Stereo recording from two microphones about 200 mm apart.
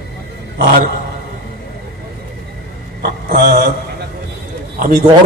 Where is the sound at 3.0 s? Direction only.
45° right (ahead or behind).